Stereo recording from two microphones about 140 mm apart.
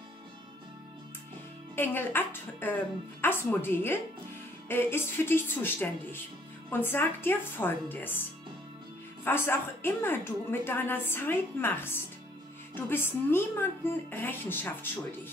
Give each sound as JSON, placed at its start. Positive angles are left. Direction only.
{"t": 1.8, "sound": "a woman's voice", "side_deg": 15}